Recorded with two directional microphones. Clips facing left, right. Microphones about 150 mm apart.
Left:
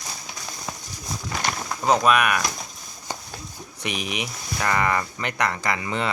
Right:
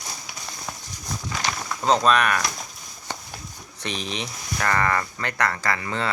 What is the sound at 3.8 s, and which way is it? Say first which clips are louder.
Speech: left 1 dB; 15° left (ahead or behind).